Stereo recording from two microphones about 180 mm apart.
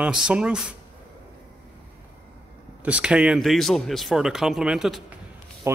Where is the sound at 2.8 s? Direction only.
5° right (ahead or behind).